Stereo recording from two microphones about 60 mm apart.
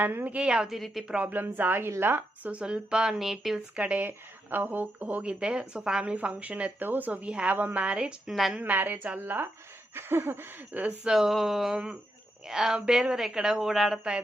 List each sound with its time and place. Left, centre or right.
0.0 s a woman's voice: right
0.3 s a woman's voice: centre
0.7 s a woman's voice: centre
1.1 s a woman's voice: right
2.5 s a woman's voice: centre
3.8 s speech: right
4.0 s speech: right
8.3 s a woman's voice: centre
8.5 s a woman's voice: right
11.0 s a woman's voice: centre